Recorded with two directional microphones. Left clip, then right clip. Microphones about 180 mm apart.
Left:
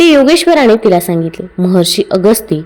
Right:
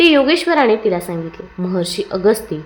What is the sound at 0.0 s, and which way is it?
A woman's voice, 40° left (ahead or behind).